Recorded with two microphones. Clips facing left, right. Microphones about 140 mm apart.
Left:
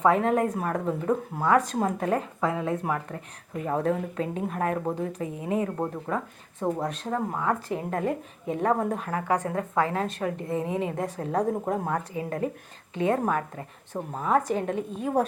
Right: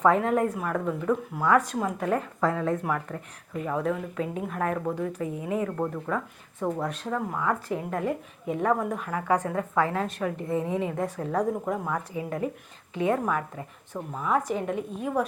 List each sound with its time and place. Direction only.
0.1 s speech: 20° left (ahead or behind)
0.5 s a woman's voice: 35° left (ahead or behind)
3.7 s a woman's voice: 40° left (ahead or behind)
4.4 s a woman's voice: 30° left (ahead or behind)
10.9 s a woman's voice: 35° left (ahead or behind)
12.9 s a woman's voice: 30° left (ahead or behind)